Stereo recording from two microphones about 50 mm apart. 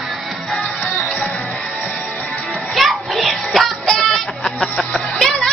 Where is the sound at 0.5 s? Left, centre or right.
Centre.